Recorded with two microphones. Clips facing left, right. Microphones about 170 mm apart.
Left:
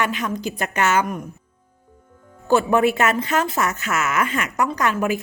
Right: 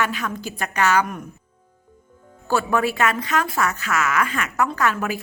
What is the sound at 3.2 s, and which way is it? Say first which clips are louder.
Speech: left 1 dB; 25° left (ahead or behind).